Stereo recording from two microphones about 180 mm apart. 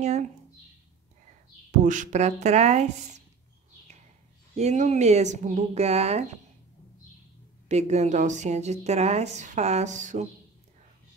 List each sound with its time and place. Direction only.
1.7 s speech: 45° right (ahead or behind)
4.6 s speech: 40° right (ahead or behind)
7.6 s speech: 40° right (ahead or behind)